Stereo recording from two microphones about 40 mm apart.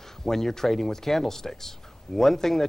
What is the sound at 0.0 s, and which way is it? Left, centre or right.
Speech, centre.